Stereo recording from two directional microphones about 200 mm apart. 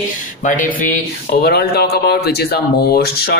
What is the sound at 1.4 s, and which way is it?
Speech, 50° left (ahead or behind).